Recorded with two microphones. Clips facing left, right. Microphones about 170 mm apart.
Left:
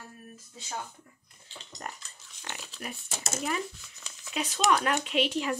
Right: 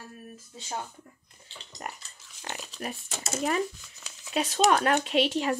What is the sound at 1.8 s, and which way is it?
Dog, 10° right (ahead or behind).